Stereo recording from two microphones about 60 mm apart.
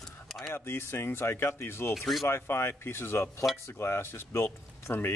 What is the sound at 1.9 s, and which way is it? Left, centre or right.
Speech, centre.